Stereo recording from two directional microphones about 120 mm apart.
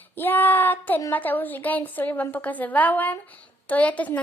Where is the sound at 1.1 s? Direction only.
15° left (ahead or behind).